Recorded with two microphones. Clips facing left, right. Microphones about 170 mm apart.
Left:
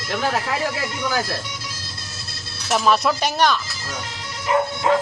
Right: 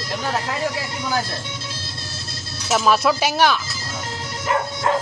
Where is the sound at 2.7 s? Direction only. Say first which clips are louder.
Right 1 dB; centre (ahead or behind).